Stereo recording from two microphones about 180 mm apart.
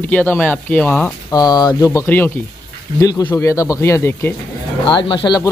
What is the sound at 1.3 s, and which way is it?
Speech, 20° left (ahead or behind).